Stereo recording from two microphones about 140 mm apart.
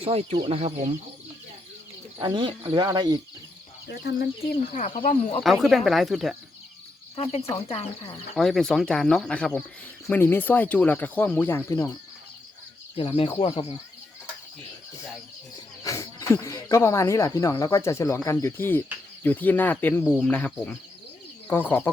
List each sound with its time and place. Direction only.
0.0 s speech: 45° right (ahead or behind)
2.2 s speech: 35° right (ahead or behind)
4.2 s speech: 80° left
5.6 s speech: centre (ahead or behind)
7.2 s speech: 50° left (ahead or behind)
8.4 s speech: centre (ahead or behind); by 11.9 s 20° left (ahead or behind)
13.0 s speech: 40° left (ahead or behind)
15.8 s speech: 25° left (ahead or behind)